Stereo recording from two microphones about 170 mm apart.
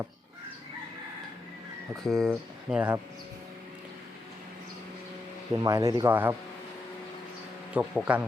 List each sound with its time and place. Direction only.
2.0 s speech: centre (ahead or behind)
5.6 s speech: 20° right (ahead or behind)
7.7 s speech: 10° right (ahead or behind)